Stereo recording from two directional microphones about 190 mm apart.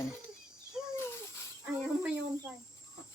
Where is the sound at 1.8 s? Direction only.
5° right (ahead or behind).